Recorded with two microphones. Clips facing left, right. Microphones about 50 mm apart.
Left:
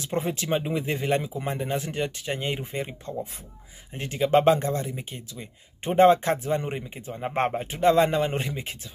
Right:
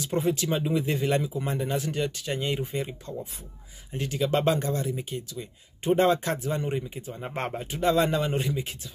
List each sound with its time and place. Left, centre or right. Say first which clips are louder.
0.0 s speech: right 2 dB; left